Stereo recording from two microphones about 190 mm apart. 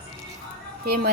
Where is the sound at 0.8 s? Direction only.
55° right (ahead or behind).